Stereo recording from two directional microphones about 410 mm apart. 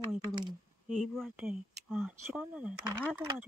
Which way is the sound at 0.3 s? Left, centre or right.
Centre.